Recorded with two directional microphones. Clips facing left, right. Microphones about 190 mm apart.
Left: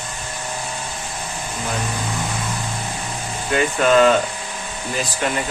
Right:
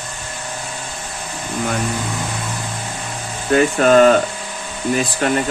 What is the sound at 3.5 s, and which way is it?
Speech, 45° right (ahead or behind).